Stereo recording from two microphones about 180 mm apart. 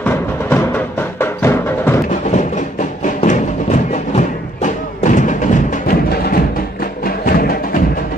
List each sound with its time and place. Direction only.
0.0 s music: 10° left (ahead or behind)
3.2 s music: 40° left (ahead or behind)